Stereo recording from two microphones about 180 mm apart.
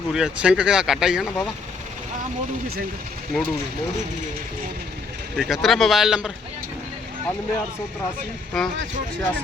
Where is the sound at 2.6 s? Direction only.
60° right (ahead or behind).